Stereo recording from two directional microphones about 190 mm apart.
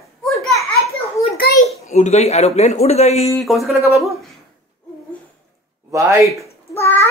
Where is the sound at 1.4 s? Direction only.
55° left (ahead or behind).